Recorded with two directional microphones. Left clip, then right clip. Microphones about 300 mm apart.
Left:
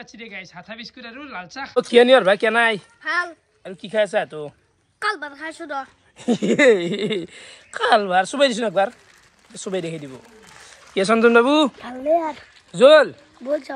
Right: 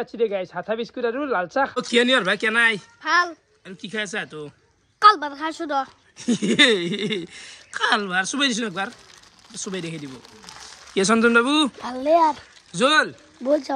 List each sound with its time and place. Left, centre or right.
0.0 s a woman's voice: centre
1.5 s a woman's voice: centre
3.0 s speech: centre
3.6 s a woman's voice: centre
4.9 s a woman's voice: centre
6.1 s a woman's voice: centre
11.0 s a woman's voice: centre
11.8 s speech: centre
12.7 s a woman's voice: centre
13.4 s frying: right